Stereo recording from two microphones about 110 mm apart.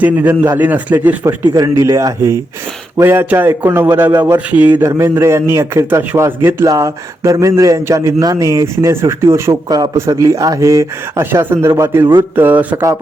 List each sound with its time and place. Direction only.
0.0 s a man's voice: 15° right (ahead or behind)
1.8 s a man's voice: 30° right (ahead or behind)